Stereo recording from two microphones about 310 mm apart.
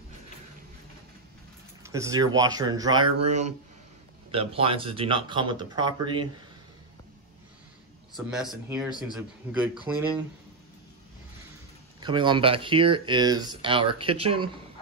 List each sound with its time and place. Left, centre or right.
1.8 s speech: centre
3.0 s speech: right
3.3 s speech: right
8.3 s a man's voice: centre
12.0 s speech: centre